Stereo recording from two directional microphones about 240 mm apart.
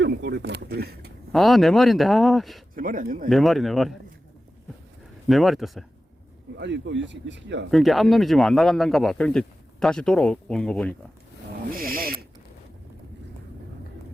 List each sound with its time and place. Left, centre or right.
0.0 s speech: right
1.3 s speech: centre
2.7 s speech: right
3.2 s speech: centre
5.3 s speech: centre
6.6 s speech: right
7.7 s speech: centre
11.7 s speech: right